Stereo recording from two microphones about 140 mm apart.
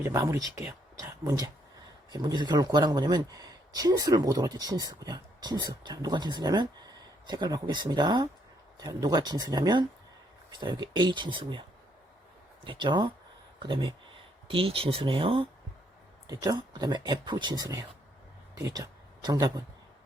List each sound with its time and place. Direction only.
0.0 s speech: 20° right (ahead or behind)
0.7 s a sound: 20° right (ahead or behind)
1.2 s speech: 25° right (ahead or behind)
12.6 s speech: 35° right (ahead or behind)
16.3 s speech: 30° right (ahead or behind)